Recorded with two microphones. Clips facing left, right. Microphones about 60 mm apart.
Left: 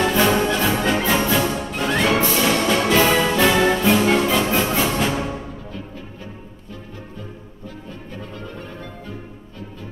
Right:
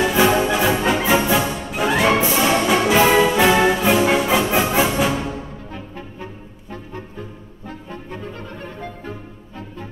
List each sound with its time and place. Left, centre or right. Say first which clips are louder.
0.0 s music: right 1 dB; centre
7.6 s music: right 3 dB; right